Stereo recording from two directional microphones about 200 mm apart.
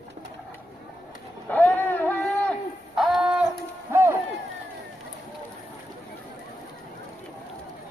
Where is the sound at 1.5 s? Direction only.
10° left (ahead or behind); by 4.2 s 10° right (ahead or behind).